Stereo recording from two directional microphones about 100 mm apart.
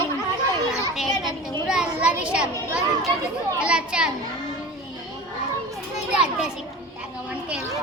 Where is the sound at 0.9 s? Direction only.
5° right (ahead or behind).